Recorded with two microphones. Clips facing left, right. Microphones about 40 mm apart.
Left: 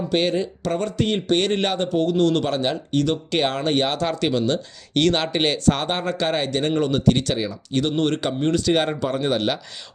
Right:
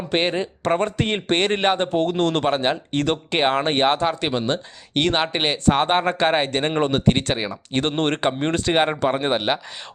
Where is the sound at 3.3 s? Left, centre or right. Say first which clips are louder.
Right 2 dB; right.